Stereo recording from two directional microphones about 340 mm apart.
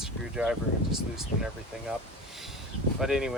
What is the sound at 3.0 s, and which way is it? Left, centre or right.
Speech, centre.